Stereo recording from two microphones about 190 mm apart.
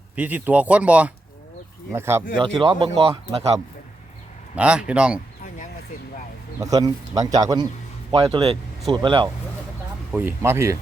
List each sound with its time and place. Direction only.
0.2 s speech: 10° right (ahead or behind)
2.4 s speech: 25° right (ahead or behind)
4.5 s a man's voice: 5° right (ahead or behind)
6.6 s speech: 20° right (ahead or behind)
10.1 s speech: 10° right (ahead or behind)